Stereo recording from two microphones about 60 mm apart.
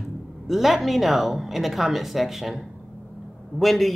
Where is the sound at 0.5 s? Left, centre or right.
Centre.